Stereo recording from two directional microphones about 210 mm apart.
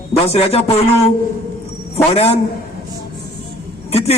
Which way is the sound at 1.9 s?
30° left (ahead or behind).